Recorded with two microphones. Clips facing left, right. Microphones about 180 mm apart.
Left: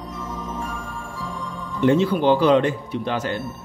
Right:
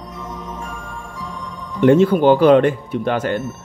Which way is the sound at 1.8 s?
55° right (ahead or behind).